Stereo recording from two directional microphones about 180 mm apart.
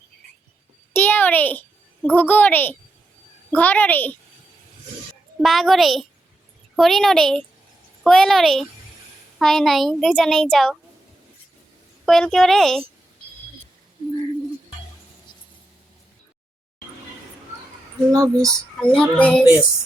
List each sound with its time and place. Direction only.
0.9 s a child's voice: 10° left (ahead or behind)
5.4 s a child's voice: centre (ahead or behind)
12.0 s a child's voice: centre (ahead or behind)
18.1 s speech: 20° right (ahead or behind)
18.8 s a child's voice: 5° left (ahead or behind)